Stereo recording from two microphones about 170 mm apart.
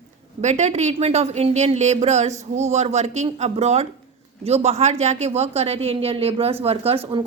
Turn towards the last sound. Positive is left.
turn(degrees=-35)  # may be behind; listen again after turning